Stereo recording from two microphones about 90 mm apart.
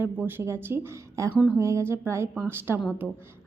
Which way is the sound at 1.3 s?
15° right (ahead or behind).